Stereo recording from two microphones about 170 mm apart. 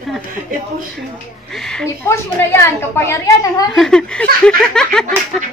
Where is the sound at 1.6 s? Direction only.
5° left (ahead or behind).